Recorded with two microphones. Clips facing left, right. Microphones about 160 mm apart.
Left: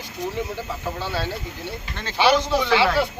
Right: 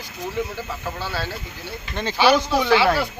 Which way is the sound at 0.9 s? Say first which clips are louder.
Left 1 dB; 20° left (ahead or behind).